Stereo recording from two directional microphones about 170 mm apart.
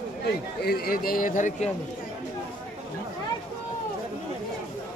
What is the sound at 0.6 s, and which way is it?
A man's voice, 65° left (ahead or behind).